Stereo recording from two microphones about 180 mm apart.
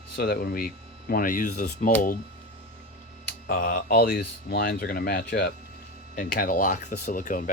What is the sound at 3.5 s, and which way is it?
Speech, 55° left (ahead or behind).